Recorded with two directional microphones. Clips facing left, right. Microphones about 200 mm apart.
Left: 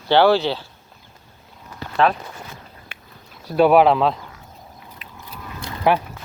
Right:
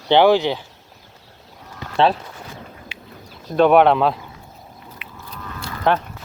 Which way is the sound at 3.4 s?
5° left (ahead or behind).